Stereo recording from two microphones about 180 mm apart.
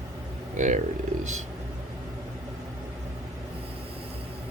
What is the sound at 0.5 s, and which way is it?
Speech, 45° right (ahead or behind).